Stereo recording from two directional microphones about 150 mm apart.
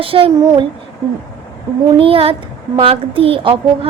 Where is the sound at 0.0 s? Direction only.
35° right (ahead or behind).